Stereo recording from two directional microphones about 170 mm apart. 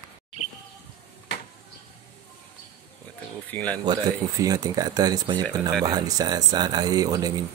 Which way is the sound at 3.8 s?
25° right (ahead or behind).